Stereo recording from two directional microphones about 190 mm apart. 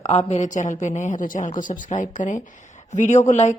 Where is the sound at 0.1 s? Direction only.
35° left (ahead or behind).